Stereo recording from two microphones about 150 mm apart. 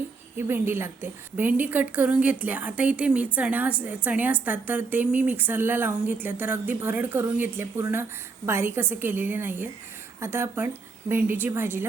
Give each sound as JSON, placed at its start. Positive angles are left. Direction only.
{"t": 0.3, "sound": "a woman's voice", "side_deg": -15}